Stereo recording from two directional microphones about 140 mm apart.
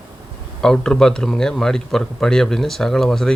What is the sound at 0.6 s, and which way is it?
Speech, 5° left (ahead or behind).